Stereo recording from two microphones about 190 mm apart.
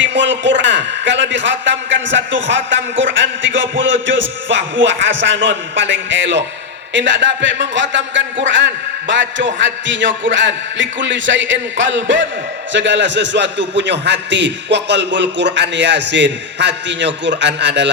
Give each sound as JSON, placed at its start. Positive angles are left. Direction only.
{"t": 0.0, "sound": "a man's voice", "side_deg": -70}